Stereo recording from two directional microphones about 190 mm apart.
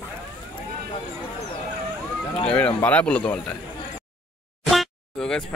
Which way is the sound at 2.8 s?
5° left (ahead or behind).